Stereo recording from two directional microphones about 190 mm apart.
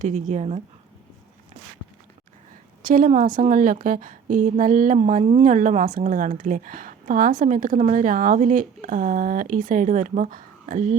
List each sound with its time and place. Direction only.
0.0 s speech: 40° right (ahead or behind)
2.8 s a woman's voice: 45° right (ahead or behind)